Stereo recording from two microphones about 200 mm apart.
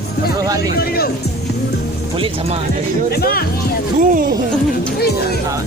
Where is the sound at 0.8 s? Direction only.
50° left (ahead or behind).